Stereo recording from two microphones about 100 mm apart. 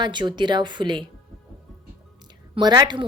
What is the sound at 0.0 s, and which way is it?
Speech, 50° right (ahead or behind).